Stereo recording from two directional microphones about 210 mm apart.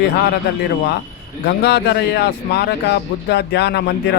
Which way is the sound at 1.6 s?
50° left (ahead or behind).